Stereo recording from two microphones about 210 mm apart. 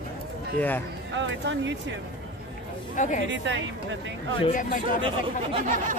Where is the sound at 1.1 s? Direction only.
60° right (ahead or behind).